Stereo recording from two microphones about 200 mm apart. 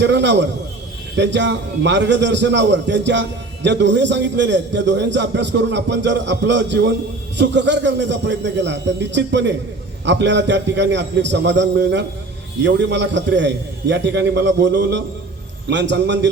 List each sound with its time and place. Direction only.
0.0 s a man's voice: 60° right (ahead or behind)